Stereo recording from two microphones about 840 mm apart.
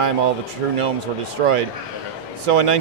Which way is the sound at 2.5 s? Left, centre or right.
Right.